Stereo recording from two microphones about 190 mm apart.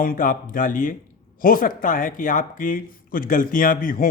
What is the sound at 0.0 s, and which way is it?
Speech, 45° left (ahead or behind).